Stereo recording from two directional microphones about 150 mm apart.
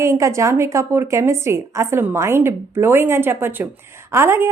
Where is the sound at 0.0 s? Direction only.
20° right (ahead or behind).